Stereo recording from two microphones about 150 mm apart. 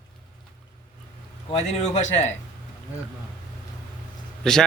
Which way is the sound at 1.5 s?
50° left (ahead or behind).